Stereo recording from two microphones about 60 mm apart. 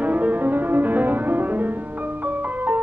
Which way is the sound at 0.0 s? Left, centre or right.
Right.